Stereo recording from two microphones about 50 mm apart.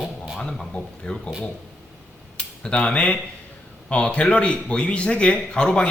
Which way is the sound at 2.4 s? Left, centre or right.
Left.